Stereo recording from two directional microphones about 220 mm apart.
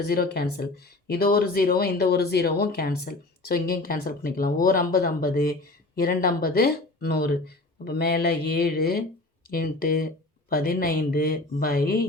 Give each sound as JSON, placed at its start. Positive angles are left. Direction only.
{"t": 0.3, "sound": "speech", "side_deg": 45}